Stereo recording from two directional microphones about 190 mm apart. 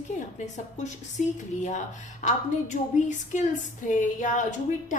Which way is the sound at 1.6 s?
40° left (ahead or behind).